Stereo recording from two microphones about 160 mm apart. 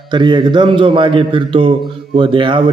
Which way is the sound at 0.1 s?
30° right (ahead or behind).